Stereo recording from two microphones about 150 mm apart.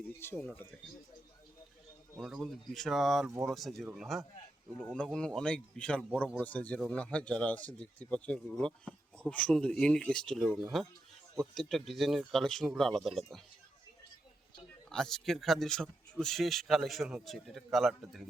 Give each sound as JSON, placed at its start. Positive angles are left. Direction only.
{"t": 0.2, "sound": "speech", "side_deg": 10}
{"t": 2.1, "sound": "speech", "side_deg": -5}
{"t": 3.2, "sound": "speech", "side_deg": -20}
{"t": 3.5, "sound": "speech", "side_deg": 0}
{"t": 6.1, "sound": "speech", "side_deg": -10}
{"t": 6.4, "sound": "speech", "side_deg": 10}
{"t": 14.8, "sound": "speech", "side_deg": 5}